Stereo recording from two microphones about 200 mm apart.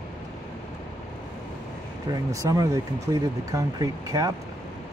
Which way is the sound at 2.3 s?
15° right (ahead or behind).